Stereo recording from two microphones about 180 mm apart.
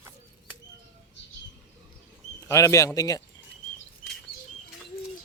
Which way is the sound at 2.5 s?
15° left (ahead or behind).